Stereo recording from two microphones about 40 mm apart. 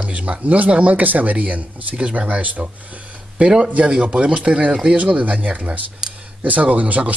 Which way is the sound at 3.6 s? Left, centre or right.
Right.